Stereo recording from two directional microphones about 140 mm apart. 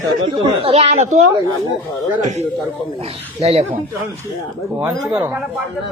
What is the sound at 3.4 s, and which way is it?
Speech, 50° right (ahead or behind).